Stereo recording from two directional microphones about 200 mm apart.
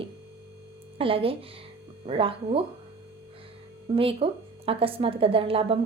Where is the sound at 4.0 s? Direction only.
30° right (ahead or behind).